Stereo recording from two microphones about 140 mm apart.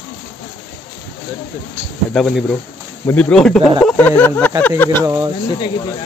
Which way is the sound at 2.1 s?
Centre (ahead or behind).